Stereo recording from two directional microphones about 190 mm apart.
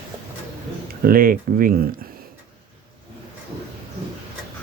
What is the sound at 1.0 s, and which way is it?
Speech, 50° right (ahead or behind).